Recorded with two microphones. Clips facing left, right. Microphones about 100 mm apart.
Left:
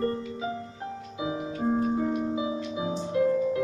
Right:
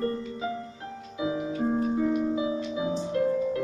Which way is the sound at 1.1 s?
15° left (ahead or behind).